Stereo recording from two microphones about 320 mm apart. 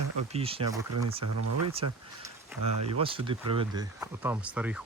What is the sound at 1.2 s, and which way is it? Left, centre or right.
Speech, right.